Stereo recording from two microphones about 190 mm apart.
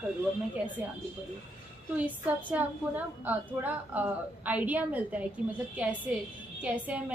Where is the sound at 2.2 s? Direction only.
10° right (ahead or behind).